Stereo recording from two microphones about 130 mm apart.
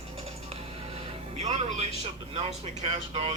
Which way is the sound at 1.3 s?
60° right (ahead or behind).